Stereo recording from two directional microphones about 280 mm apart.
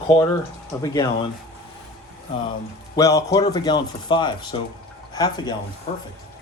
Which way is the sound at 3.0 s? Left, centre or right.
Centre.